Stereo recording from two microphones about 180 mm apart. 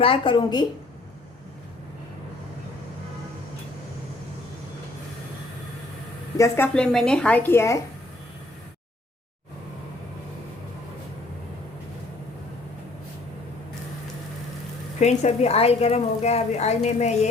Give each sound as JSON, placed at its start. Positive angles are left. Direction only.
{"t": 0.0, "sound": "a woman's voice", "side_deg": 30}
{"t": 6.3, "sound": "a woman's voice", "side_deg": 15}
{"t": 6.7, "sound": "a woman's voice", "side_deg": 5}
{"t": 15.0, "sound": "a woman's voice", "side_deg": 40}